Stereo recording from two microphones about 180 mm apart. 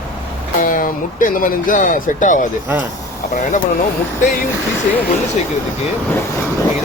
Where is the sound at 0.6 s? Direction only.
50° left (ahead or behind).